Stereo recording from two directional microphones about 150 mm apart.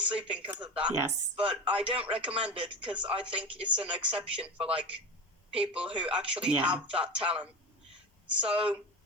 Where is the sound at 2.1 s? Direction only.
10° right (ahead or behind).